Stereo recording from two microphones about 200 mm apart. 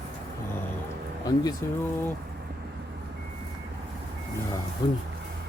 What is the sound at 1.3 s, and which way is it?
Speech, 20° left (ahead or behind).